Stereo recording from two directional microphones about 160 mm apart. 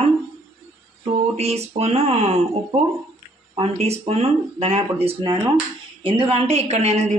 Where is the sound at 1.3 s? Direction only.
40° right (ahead or behind).